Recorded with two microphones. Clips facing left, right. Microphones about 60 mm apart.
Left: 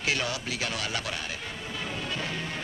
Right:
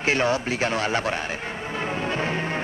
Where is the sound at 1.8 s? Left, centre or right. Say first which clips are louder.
Right 8 dB; right.